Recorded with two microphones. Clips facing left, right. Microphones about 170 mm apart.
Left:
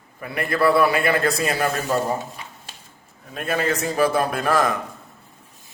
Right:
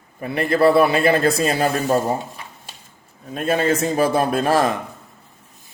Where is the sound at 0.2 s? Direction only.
25° right (ahead or behind).